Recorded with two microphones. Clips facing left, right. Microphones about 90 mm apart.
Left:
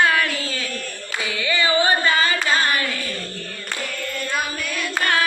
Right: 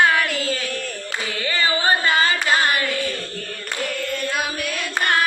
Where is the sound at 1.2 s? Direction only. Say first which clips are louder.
Left 2 dB; 50° right (ahead or behind).